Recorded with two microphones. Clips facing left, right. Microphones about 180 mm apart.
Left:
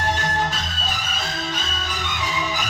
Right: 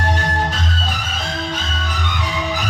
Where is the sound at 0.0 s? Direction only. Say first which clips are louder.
Right 2 dB; 60° right (ahead or behind).